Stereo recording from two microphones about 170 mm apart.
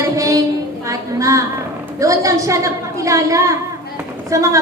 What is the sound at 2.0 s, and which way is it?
A woman's voice, 20° right (ahead or behind).